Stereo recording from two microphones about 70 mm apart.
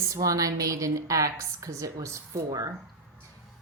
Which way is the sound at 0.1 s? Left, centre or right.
Right.